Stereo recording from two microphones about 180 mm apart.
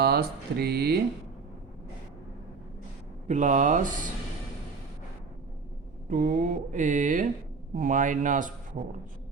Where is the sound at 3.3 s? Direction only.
40° right (ahead or behind).